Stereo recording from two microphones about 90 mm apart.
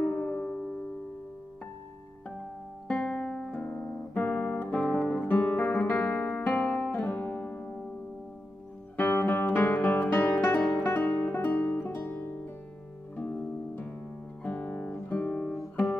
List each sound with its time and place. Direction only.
0.0 s music: 10° left (ahead or behind)
2.9 s music: 10° left (ahead or behind)
3.5 s guitar: 15° left (ahead or behind)
8.9 s music: 20° left (ahead or behind)
11.3 s guitar: 25° left (ahead or behind)
13.1 s music: 20° left (ahead or behind)
14.4 s guitar: 20° left (ahead or behind)
15.7 s music: 20° left (ahead or behind)